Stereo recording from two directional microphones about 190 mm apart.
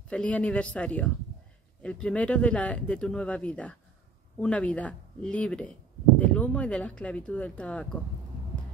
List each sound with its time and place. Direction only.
0.1 s speech: 5° left (ahead or behind)